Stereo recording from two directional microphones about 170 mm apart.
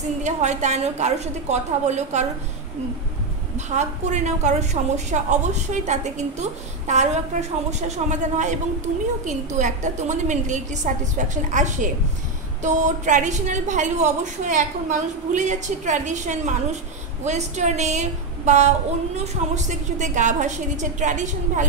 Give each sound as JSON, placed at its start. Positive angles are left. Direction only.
{"t": 0.2, "sound": "a woman's voice", "side_deg": -45}
{"t": 3.5, "sound": "a woman's voice", "side_deg": -45}